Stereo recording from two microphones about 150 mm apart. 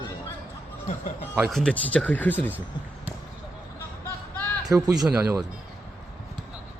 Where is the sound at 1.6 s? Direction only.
10° left (ahead or behind).